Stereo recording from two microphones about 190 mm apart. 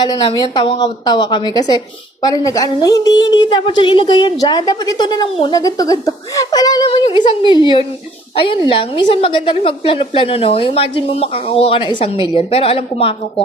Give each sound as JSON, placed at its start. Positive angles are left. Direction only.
{"t": 0.0, "sound": "a woman's voice", "side_deg": 20}